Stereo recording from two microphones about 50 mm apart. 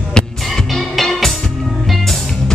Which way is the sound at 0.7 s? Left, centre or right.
Centre.